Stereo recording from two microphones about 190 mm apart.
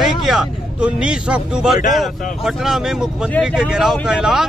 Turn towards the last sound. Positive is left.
turn(degrees=-5)  # may be behind; listen again after turning